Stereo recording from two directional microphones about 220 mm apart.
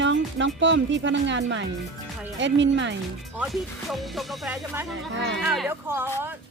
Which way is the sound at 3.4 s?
Centre (ahead or behind).